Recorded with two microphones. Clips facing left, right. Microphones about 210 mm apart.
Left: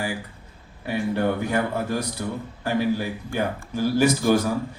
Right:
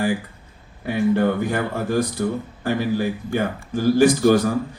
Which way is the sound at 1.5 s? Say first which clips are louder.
Right 2 dB; 50° right (ahead or behind).